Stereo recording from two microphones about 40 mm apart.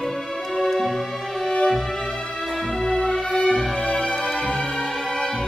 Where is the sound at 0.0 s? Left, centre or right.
Centre.